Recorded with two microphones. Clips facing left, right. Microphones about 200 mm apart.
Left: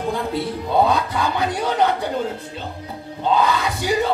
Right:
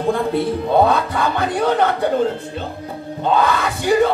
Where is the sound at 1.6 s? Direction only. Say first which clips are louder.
Right 4 dB; 55° right (ahead or behind).